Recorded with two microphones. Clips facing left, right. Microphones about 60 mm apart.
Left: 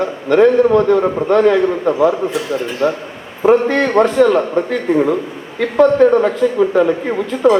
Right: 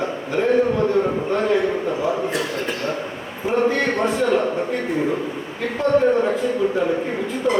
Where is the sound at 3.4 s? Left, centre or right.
Left.